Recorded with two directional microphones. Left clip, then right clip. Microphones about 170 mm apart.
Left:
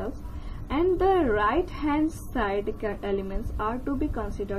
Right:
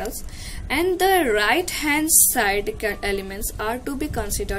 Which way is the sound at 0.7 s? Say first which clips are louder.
Right 4 dB; 25° right (ahead or behind).